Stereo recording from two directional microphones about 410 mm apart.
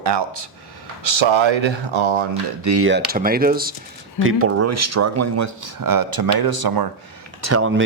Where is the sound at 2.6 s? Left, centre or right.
Right.